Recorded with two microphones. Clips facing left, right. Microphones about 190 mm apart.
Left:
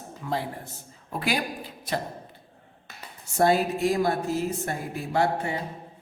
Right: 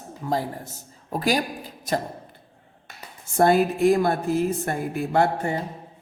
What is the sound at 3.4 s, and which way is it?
A woman's voice, 55° right (ahead or behind).